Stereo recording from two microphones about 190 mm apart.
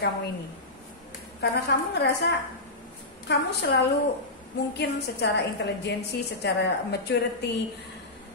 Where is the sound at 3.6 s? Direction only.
65° left (ahead or behind).